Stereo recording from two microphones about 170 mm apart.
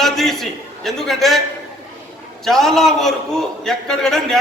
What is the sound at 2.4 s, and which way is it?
A man's voice, centre (ahead or behind).